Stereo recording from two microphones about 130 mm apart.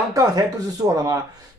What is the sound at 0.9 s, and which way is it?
Speech, 30° right (ahead or behind).